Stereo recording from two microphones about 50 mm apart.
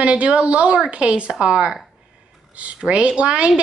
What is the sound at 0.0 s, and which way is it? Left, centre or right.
Speech, right.